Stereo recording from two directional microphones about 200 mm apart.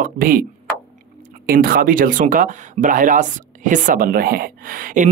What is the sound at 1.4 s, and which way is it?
Speech, 45° right (ahead or behind).